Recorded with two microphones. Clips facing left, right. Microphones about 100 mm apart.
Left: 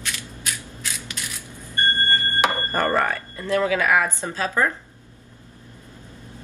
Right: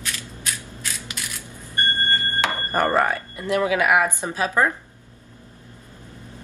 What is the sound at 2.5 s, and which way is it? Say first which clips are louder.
Speech: right 1 dB; 15° right (ahead or behind).